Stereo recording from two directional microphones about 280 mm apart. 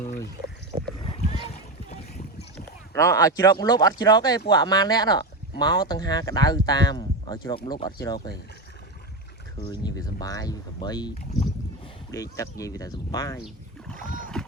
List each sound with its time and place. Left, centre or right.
1.0 s boat: left
2.9 s speech: centre
9.6 s speech: centre
12.1 s speech: centre
14.3 s music: centre